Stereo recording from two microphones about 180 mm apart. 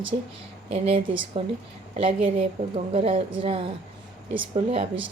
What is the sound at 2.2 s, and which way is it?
Speech, 30° right (ahead or behind).